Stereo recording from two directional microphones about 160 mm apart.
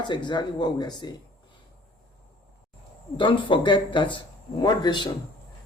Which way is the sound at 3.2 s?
30° left (ahead or behind).